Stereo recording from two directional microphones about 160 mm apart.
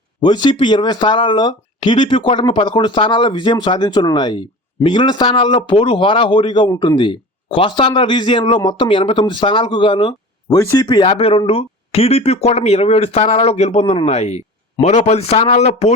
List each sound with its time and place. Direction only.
0.2 s speech: 25° left (ahead or behind)
10.6 s speech: 20° left (ahead or behind)
10.8 s speech: 30° left (ahead or behind)